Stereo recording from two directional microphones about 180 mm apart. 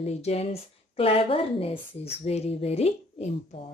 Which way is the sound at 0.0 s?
35° left (ahead or behind).